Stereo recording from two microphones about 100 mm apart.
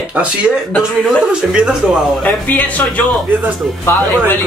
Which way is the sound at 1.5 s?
10° right (ahead or behind).